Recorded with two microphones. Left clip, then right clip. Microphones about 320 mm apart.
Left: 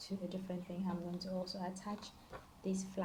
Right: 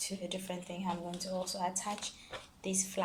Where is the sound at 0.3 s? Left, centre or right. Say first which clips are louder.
Right 5 dB; right.